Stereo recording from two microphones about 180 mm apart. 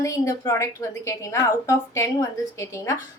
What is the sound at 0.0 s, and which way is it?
A woman's voice, 15° left (ahead or behind).